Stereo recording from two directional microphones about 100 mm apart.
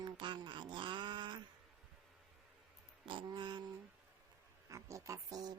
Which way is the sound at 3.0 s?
55° right (ahead or behind).